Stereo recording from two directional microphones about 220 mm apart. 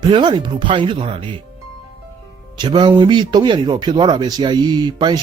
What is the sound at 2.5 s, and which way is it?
Speech, 20° right (ahead or behind).